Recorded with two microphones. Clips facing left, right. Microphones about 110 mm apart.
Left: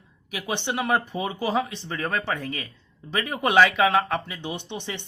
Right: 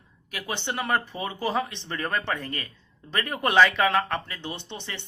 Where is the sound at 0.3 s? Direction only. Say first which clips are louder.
Left 3 dB; 15° left (ahead or behind).